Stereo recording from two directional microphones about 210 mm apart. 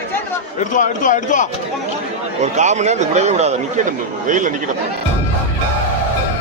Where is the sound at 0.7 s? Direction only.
40° left (ahead or behind).